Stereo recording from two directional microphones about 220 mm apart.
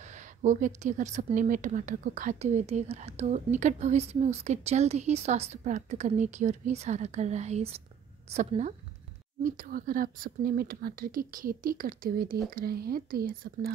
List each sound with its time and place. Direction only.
0.4 s a woman's voice: 35° right (ahead or behind)